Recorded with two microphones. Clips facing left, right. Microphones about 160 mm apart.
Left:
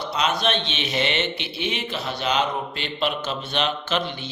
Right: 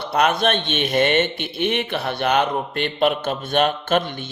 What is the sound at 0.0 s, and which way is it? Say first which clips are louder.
A man's voice: right 5 dB; 60° right (ahead or behind).